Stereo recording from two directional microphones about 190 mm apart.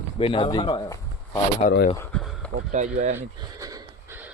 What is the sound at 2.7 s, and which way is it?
Speech, 40° right (ahead or behind).